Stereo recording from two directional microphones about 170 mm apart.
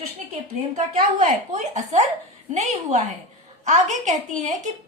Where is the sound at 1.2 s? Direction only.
45° right (ahead or behind).